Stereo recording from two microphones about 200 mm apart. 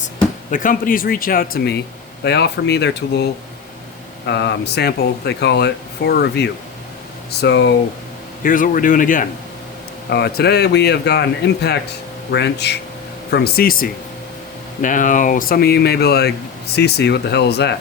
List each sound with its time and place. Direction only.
0.5 s speech: 45° left (ahead or behind)
4.3 s speech: 60° left (ahead or behind)
8.4 s speech: 45° left (ahead or behind)
10.1 s speech: 55° left (ahead or behind)